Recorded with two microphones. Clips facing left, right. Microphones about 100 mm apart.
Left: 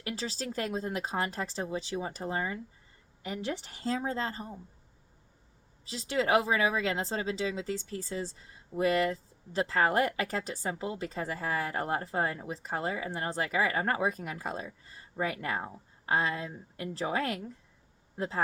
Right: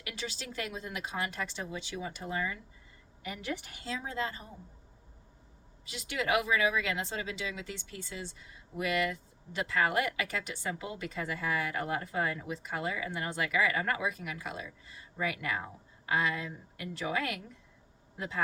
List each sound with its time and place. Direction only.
0.0 s speech: 35° left (ahead or behind)
5.8 s speech: 30° left (ahead or behind)